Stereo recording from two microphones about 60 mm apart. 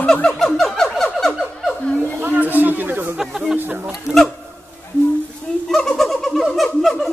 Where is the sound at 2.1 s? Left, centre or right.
Right.